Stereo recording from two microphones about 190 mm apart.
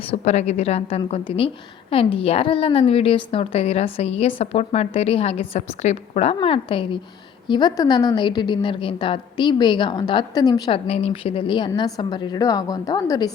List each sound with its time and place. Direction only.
0.1 s a woman's voice: 35° left (ahead or behind); by 10.8 s 20° left (ahead or behind)
10.8 s a woman's voice: 30° left (ahead or behind)